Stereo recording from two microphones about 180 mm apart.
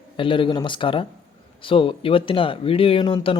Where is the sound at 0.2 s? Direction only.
30° left (ahead or behind).